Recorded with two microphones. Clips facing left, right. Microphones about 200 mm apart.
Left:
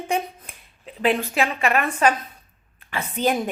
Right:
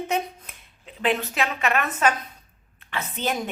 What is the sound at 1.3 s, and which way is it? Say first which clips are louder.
Speech: left 3 dB; 35° left (ahead or behind).